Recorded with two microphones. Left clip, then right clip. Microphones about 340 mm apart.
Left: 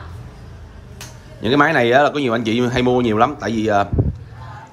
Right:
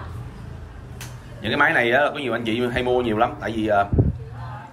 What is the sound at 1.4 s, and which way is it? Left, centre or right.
Speech, centre.